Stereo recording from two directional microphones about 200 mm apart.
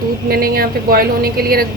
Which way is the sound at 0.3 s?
50° right (ahead or behind).